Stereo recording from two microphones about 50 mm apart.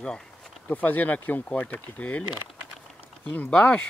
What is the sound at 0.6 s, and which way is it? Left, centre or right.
Speech, left.